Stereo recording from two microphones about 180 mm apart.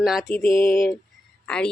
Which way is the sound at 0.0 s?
Centre (ahead or behind).